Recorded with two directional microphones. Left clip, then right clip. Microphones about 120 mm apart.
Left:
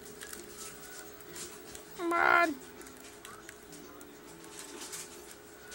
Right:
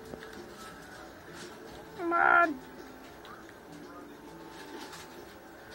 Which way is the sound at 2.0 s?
55° left (ahead or behind).